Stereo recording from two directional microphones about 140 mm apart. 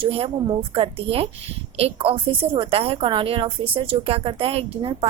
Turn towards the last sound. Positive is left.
turn(degrees=-40)  # may be behind; listen again after turning